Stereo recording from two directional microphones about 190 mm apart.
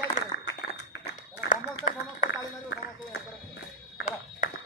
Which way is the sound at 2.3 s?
65° left (ahead or behind).